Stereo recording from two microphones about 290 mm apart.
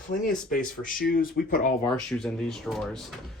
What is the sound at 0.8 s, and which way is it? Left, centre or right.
Speech, left.